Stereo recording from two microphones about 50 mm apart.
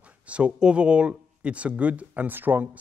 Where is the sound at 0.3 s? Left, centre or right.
Right.